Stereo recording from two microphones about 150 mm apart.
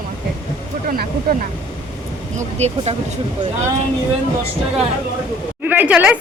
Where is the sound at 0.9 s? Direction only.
85° right.